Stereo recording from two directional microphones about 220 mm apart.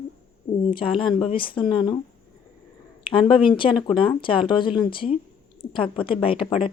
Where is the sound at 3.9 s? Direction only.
25° left (ahead or behind).